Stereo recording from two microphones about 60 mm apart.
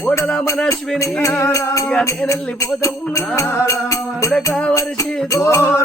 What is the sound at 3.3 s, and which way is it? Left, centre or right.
Music, left.